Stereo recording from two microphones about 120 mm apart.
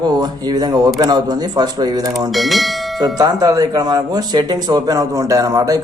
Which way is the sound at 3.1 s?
30° right (ahead or behind).